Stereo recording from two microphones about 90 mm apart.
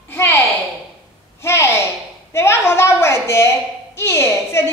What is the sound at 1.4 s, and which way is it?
A woman's voice, 30° left (ahead or behind).